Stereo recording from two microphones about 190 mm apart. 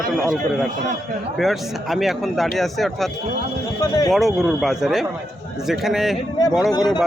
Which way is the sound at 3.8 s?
15° left (ahead or behind).